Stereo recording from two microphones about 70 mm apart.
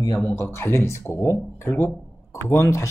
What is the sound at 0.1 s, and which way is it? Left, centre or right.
Speech, left.